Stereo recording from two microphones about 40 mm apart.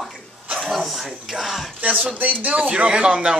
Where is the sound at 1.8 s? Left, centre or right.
Right.